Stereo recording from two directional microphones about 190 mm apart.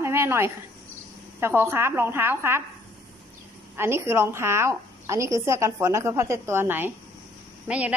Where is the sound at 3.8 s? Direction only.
15° right (ahead or behind).